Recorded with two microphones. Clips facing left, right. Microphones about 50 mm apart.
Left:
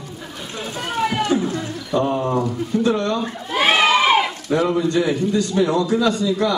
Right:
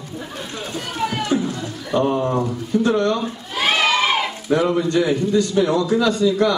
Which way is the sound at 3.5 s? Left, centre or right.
Centre.